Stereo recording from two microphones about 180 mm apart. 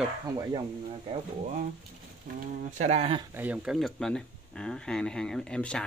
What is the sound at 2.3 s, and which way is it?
Speech, 50° right (ahead or behind).